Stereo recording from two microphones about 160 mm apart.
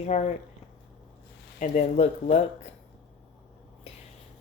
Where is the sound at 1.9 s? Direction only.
40° left (ahead or behind).